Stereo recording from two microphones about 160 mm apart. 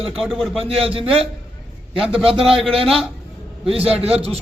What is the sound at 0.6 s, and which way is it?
Speech, 35° right (ahead or behind).